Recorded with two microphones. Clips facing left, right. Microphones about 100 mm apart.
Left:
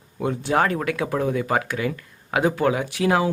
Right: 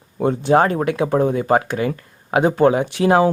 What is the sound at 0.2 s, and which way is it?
Speech, 35° right (ahead or behind).